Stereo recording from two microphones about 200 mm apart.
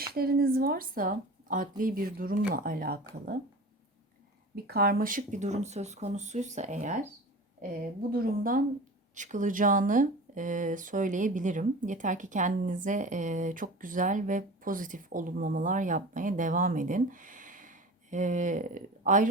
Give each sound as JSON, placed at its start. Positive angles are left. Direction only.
{"t": 0.0, "sound": "speech", "side_deg": -50}
{"t": 4.5, "sound": "speech", "side_deg": -50}
{"t": 8.1, "sound": "speech", "side_deg": -45}